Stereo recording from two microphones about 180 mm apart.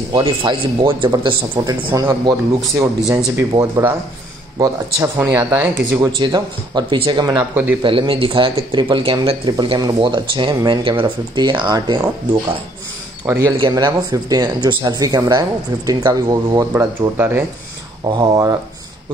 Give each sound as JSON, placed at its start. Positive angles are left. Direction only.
{"t": 0.1, "sound": "speech", "side_deg": -25}
{"t": 13.3, "sound": "speech", "side_deg": -20}